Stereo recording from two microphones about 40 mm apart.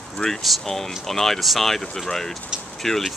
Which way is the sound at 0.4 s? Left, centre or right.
Centre.